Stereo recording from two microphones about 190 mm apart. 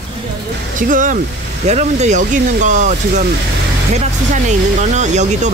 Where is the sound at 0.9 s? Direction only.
45° right (ahead or behind).